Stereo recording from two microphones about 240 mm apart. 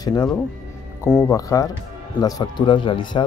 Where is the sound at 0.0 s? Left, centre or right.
Centre.